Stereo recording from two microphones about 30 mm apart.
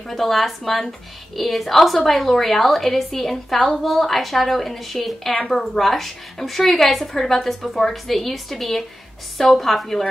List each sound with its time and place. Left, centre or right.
0.1 s a woman's voice: centre